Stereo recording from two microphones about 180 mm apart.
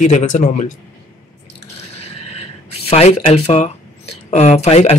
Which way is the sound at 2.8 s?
35° left (ahead or behind).